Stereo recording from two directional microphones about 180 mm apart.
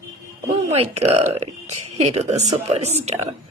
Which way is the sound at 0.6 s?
35° right (ahead or behind).